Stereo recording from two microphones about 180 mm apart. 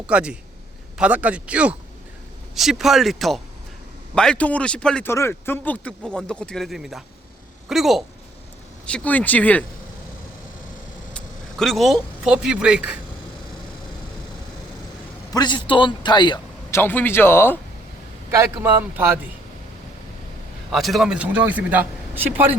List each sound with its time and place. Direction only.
0.1 s a man's voice: 5° right (ahead or behind)
11.6 s a man's voice: centre (ahead or behind)
15.3 s a man's voice: 25° left (ahead or behind)
16.7 s speech: 10° left (ahead or behind)
18.3 s a man's voice: 15° right (ahead or behind)
20.7 s a man's voice: centre (ahead or behind)